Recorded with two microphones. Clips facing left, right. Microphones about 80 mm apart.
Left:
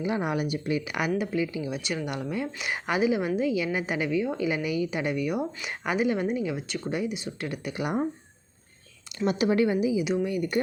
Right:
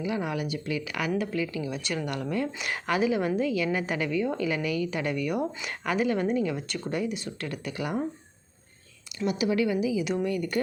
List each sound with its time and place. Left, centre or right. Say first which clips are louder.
0.0 s a woman's voice: left 2 dB; left
9.1 s a woman's voice: left 2 dB; left; by 10.6 s centre